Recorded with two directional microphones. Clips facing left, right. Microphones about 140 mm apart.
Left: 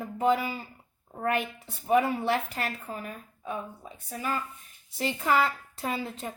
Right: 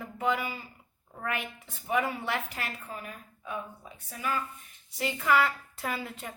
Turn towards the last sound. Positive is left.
turn(degrees=25)  # may be behind; listen again after turning